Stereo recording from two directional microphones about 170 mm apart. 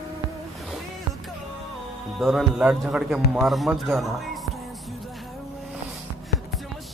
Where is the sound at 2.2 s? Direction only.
Centre (ahead or behind).